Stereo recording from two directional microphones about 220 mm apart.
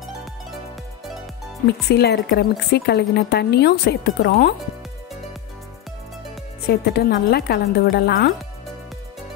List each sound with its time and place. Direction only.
0.0 s music: centre (ahead or behind)
1.9 s a woman's voice: 50° left (ahead or behind)
6.7 s a woman's voice: 45° left (ahead or behind)